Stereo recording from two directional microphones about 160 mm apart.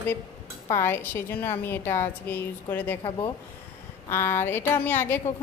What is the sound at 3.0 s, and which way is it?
Speech, 30° left (ahead or behind).